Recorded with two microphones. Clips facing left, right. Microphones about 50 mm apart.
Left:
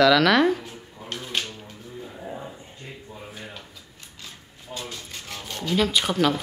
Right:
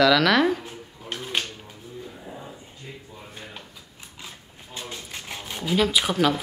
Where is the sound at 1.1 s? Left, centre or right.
Centre.